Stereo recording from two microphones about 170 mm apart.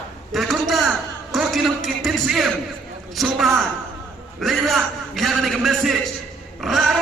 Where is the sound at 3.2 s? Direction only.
Centre (ahead or behind).